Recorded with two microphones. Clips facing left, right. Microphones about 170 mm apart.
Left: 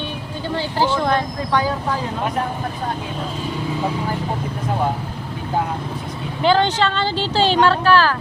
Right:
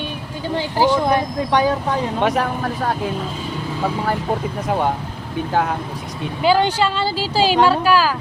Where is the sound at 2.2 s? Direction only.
90° right.